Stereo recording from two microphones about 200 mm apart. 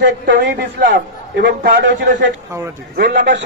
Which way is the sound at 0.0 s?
50° right (ahead or behind).